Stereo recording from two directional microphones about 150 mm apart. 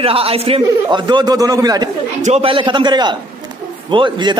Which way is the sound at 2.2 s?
45° right (ahead or behind).